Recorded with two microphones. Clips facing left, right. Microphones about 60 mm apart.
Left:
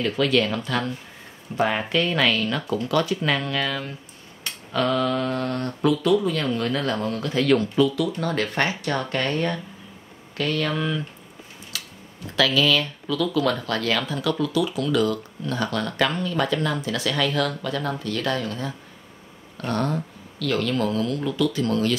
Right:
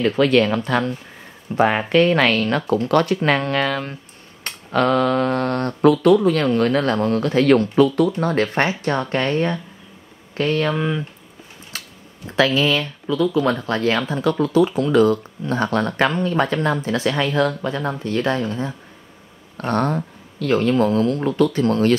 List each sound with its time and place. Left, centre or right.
0.0 s speech: right
8.2 s speech: right
11.7 s a sound: right
12.3 s speech: right
19.5 s speech: right
20.3 s speech: right